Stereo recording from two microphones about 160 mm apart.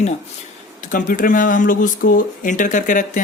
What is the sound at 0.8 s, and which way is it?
Speech, 55° left (ahead or behind).